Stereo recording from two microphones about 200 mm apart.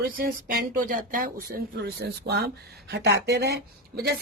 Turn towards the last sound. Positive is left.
turn(degrees=-55)  # may be behind; listen again after turning